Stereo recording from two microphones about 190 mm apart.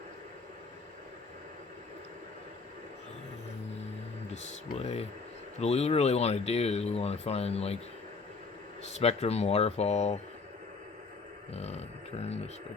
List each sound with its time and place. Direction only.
4.4 s speech: 35° left (ahead or behind)
8.8 s speech: 35° left (ahead or behind)
11.5 s speech: 35° left (ahead or behind)